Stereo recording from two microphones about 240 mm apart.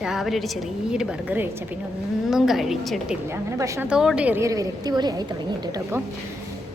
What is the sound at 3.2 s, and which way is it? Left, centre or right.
A woman's voice, centre.